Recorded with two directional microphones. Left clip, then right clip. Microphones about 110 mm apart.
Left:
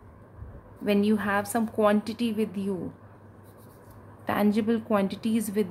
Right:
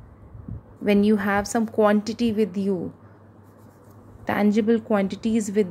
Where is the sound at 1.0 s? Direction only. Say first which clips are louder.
Right 4 dB; 35° right (ahead or behind).